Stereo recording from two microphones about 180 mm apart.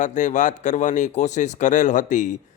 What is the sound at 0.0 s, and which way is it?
A man's voice, 45° left (ahead or behind).